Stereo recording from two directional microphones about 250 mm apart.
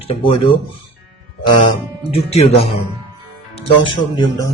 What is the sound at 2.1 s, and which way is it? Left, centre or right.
Speech, left.